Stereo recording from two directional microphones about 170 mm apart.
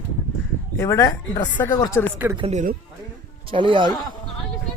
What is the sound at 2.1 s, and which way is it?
Speech, 10° right (ahead or behind).